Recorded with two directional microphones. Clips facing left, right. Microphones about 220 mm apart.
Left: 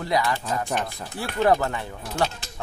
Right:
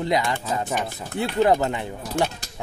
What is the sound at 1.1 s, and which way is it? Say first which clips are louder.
Speech: right 2 dB; 20° right (ahead or behind).